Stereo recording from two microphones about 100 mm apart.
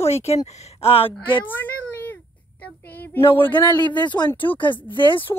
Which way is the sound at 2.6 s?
15° left (ahead or behind).